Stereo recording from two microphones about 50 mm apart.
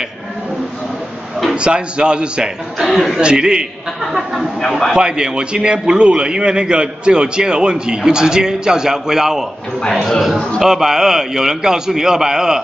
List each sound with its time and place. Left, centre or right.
1.5 s a man's voice: centre
2.9 s speech: centre
3.2 s a man's voice: centre
4.0 s speech: centre
4.9 s a man's voice: centre